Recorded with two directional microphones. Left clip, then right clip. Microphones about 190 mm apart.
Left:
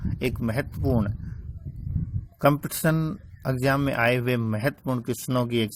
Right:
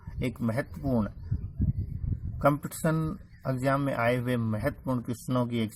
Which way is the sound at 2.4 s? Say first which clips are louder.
Left 4 dB; 30° left (ahead or behind).